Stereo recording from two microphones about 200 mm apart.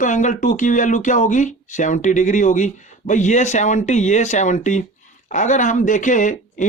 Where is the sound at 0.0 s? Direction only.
40° left (ahead or behind).